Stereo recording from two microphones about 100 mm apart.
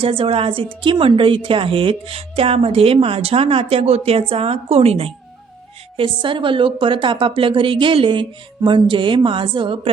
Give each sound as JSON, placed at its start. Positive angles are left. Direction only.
{"t": 0.0, "sound": "a woman's voice", "side_deg": -70}
{"t": 6.0, "sound": "a woman's voice", "side_deg": -55}